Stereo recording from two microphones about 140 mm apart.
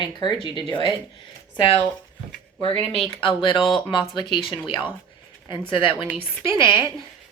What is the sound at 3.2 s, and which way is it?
Speech, 35° left (ahead or behind).